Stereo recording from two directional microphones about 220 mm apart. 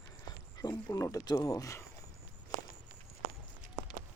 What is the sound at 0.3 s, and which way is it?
Speech, 20° left (ahead or behind).